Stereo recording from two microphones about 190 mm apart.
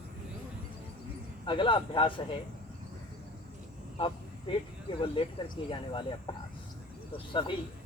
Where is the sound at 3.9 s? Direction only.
25° left (ahead or behind).